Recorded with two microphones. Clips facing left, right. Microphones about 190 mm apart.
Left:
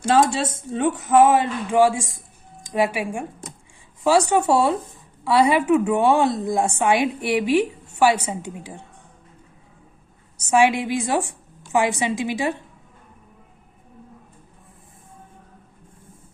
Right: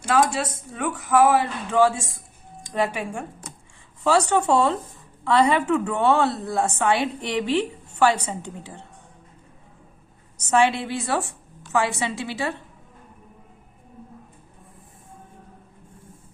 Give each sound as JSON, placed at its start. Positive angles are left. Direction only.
{"t": 0.0, "sound": "a woman's voice", "side_deg": 25}
{"t": 10.3, "sound": "a woman's voice", "side_deg": 10}